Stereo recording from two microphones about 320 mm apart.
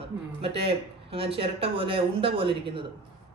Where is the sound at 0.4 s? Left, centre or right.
Centre.